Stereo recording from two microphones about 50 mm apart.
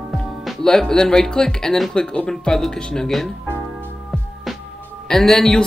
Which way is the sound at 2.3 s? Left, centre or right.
Centre.